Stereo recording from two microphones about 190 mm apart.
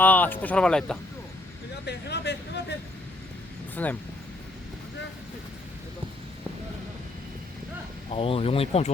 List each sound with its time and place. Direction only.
0.0 s speech: 10° left (ahead or behind)
1.8 s a sound: 60° left (ahead or behind)
3.8 s speech: 10° left (ahead or behind)
8.1 s speech: 30° left (ahead or behind)